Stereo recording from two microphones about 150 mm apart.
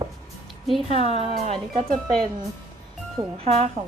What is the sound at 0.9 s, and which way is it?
Speech, 45° right (ahead or behind).